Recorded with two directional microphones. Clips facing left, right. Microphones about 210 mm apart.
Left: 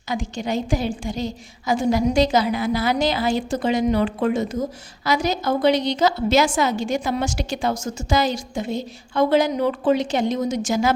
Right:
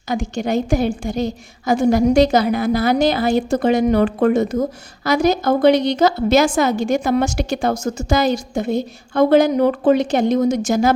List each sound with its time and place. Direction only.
0.2 s a woman's voice: 60° right (ahead or behind)